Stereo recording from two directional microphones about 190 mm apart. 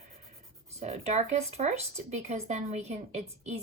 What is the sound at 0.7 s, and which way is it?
Speech, 35° right (ahead or behind).